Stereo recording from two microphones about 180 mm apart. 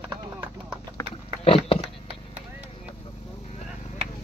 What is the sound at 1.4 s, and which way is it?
Dog, 30° left (ahead or behind).